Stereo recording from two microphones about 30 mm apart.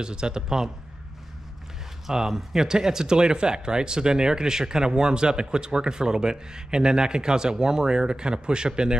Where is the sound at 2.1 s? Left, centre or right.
Centre.